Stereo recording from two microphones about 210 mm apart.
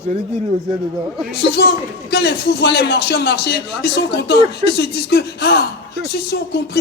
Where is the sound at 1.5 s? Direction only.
50° left (ahead or behind).